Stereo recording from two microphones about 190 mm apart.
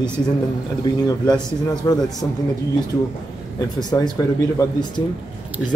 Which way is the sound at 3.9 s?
20° left (ahead or behind).